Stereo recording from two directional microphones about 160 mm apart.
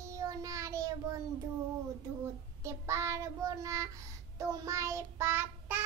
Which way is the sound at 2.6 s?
20° right (ahead or behind).